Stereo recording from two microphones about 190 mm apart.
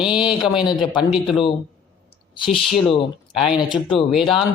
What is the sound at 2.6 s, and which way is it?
Speech, centre (ahead or behind).